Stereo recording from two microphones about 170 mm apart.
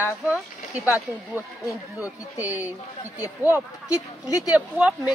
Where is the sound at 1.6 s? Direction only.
20° left (ahead or behind).